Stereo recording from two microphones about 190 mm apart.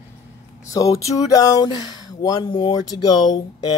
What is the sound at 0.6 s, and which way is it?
Speech, 15° left (ahead or behind).